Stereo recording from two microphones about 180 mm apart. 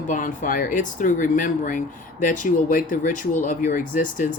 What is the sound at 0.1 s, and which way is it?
Speech, 45° left (ahead or behind).